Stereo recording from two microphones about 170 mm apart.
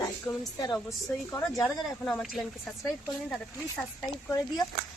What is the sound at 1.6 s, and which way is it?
Speech, centre (ahead or behind).